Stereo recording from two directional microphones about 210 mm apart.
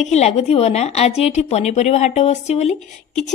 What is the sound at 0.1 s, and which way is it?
A woman's voice, 30° left (ahead or behind).